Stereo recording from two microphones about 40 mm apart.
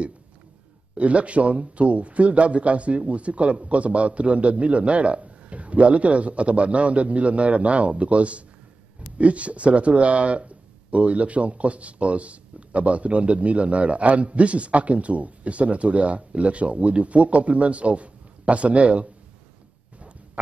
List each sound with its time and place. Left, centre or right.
0.9 s speech: right